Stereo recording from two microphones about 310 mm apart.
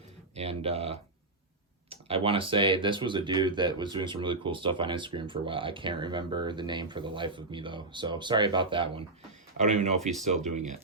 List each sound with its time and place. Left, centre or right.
0.3 s speech: centre